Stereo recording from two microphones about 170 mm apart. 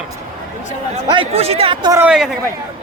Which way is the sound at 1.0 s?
30° right (ahead or behind).